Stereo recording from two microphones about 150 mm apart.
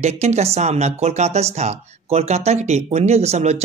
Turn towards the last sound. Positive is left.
turn(degrees=-45)  # may be behind; listen again after turning